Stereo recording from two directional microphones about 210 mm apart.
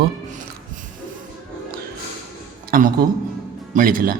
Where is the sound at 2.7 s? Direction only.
40° right (ahead or behind).